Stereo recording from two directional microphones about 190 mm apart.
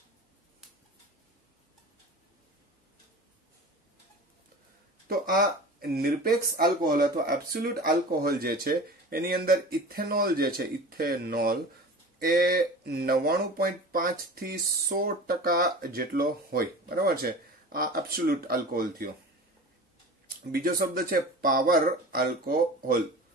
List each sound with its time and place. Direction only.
5.0 s speech: 50° right (ahead or behind)
20.5 s speech: 50° right (ahead or behind)